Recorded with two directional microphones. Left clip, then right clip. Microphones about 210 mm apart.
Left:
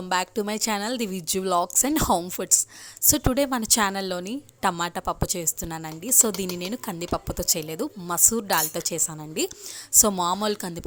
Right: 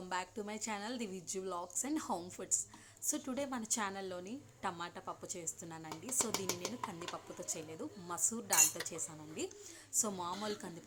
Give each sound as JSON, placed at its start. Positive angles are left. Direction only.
{"t": 0.1, "sound": "a woman's voice", "side_deg": 45}